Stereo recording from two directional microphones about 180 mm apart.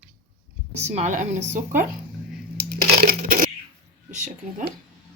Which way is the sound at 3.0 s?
50° right (ahead or behind).